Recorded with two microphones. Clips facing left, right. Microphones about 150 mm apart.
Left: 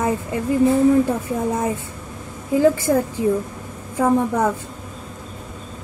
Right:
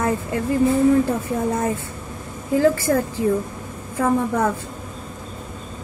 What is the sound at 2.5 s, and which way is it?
Speech, 15° left (ahead or behind).